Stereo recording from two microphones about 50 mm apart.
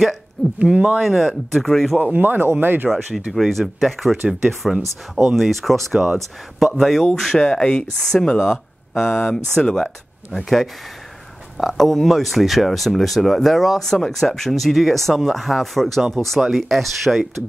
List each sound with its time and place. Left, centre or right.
0.6 s speech: right
1.0 s speech: centre
2.1 s speech: right
2.9 s speech: centre
3.3 s speech: centre
8.4 s a sound: centre
9.0 s speech: centre
10.3 s speech: centre
16.3 s speech: centre